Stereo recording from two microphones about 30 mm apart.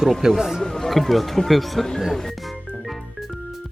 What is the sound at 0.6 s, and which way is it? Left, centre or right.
Speech, centre.